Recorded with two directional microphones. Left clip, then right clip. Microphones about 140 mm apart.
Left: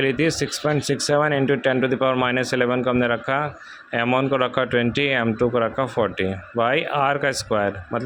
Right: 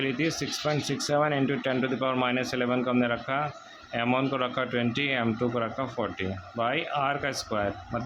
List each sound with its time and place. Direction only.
0.0 s speech: 50° left (ahead or behind)